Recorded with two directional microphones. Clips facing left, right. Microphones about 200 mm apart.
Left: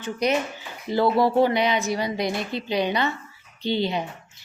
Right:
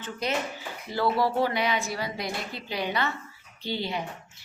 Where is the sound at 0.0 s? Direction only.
15° left (ahead or behind).